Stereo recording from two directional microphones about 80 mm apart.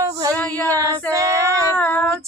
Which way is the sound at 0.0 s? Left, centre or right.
Right.